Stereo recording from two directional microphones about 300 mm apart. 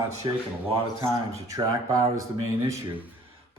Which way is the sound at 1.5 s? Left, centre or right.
Centre.